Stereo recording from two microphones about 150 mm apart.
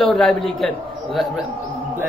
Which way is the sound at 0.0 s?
Centre (ahead or behind).